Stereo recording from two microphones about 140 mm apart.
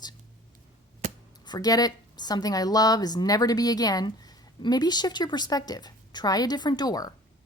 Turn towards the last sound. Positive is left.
turn(degrees=30)  # may be behind; listen again after turning